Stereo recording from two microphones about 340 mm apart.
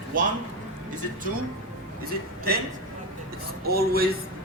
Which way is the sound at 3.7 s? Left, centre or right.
Right.